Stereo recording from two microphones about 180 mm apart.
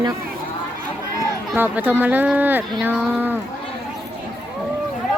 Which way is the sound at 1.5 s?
10° right (ahead or behind).